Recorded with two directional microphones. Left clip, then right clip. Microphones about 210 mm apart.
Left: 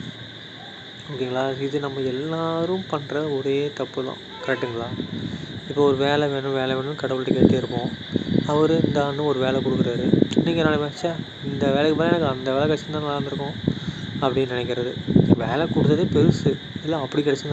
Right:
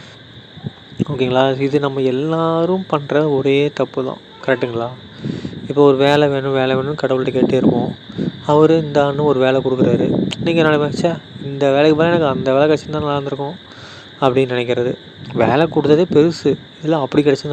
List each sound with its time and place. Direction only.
0.9 s speech: 40° right (ahead or behind)